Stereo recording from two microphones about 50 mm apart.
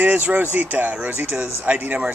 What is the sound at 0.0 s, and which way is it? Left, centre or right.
Speech, right.